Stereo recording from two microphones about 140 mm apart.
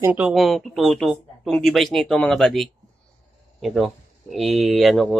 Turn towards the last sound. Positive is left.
turn(degrees=0)  # may be behind; listen again after turning